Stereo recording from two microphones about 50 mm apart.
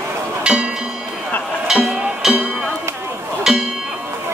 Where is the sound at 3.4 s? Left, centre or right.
Centre.